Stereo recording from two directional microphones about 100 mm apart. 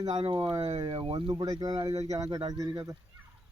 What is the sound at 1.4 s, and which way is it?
Speech, 40° right (ahead or behind).